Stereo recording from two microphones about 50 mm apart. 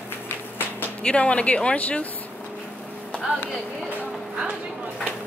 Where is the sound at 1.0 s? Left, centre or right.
Left.